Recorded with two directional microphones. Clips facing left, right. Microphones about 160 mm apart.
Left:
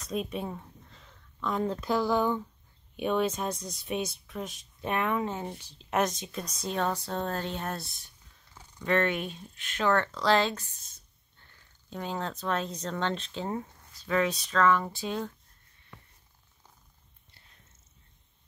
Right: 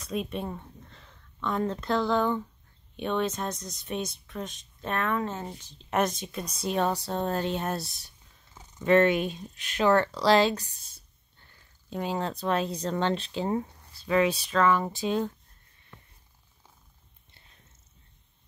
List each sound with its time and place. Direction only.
0.0 s speech: centre (ahead or behind)
5.9 s speech: centre (ahead or behind); by 7.8 s 15° right (ahead or behind)
7.8 s speech: 35° right (ahead or behind)
8.5 s speech: 20° right (ahead or behind)